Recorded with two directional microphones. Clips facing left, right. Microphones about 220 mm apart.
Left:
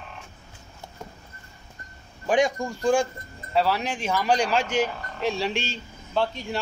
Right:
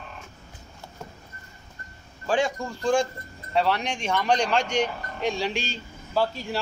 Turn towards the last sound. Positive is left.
turn(degrees=-5)  # may be behind; listen again after turning